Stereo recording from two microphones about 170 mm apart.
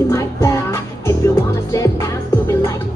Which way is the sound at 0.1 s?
20° left (ahead or behind).